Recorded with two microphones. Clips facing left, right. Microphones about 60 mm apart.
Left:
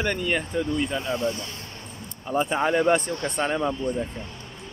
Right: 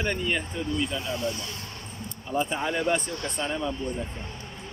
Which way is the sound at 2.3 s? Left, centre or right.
Left.